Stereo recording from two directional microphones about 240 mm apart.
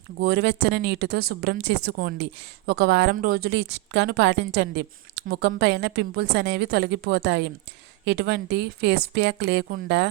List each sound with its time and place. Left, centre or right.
0.2 s a woman's voice: right